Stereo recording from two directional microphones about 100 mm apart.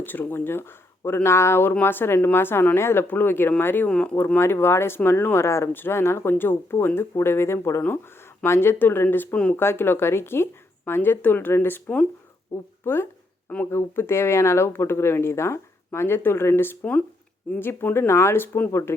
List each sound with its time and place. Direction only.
0.0 s speech: 20° left (ahead or behind)
3.8 s speech: 10° left (ahead or behind)
4.4 s speech: 25° left (ahead or behind)